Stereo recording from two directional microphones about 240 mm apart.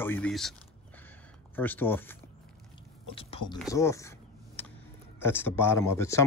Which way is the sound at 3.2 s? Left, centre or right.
Left.